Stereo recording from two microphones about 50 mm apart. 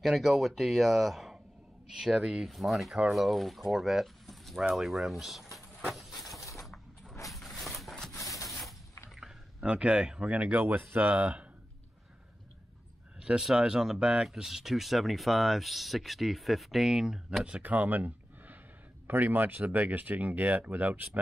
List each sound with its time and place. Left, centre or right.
0.0 s speech: centre
5.9 s a sound: centre
8.5 s mechanisms: centre
9.1 s typing: centre
9.7 s speech: right
10.2 s speech: right
13.4 s speech: centre
14.2 s speech: centre
17.6 s speech: right